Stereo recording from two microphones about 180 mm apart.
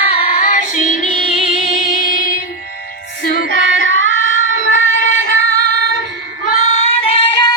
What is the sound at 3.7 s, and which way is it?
Carnatic music, 50° left (ahead or behind).